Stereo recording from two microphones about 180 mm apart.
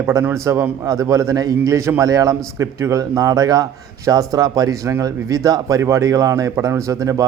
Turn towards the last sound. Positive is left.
turn(degrees=-20)  # may be behind; listen again after turning